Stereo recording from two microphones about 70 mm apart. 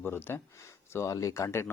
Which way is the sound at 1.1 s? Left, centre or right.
Left.